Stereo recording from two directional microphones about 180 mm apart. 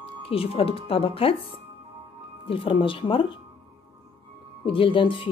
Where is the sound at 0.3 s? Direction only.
30° left (ahead or behind).